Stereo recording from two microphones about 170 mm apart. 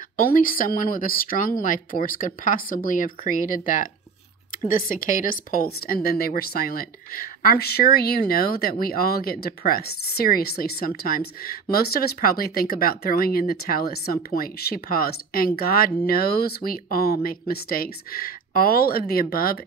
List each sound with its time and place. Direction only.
0.2 s speech: 55° left (ahead or behind)